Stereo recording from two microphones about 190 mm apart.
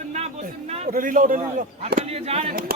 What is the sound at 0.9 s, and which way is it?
Speech, 45° right (ahead or behind).